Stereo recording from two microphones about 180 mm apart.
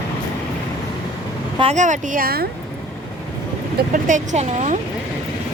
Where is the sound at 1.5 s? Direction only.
35° right (ahead or behind); by 2.5 s 55° right (ahead or behind).